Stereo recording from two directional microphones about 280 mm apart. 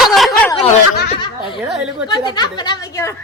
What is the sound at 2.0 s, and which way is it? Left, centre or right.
Speech, centre.